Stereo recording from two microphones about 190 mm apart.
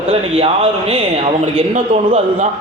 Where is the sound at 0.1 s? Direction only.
30° right (ahead or behind).